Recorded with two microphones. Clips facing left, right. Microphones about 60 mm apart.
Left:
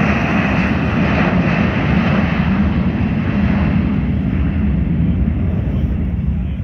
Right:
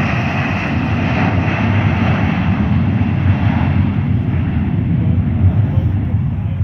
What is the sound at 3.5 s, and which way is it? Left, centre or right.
Vehicle, left.